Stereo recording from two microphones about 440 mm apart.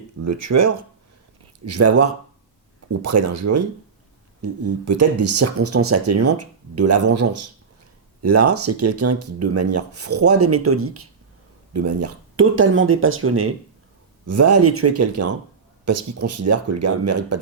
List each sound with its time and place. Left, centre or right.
0.3 s speech: right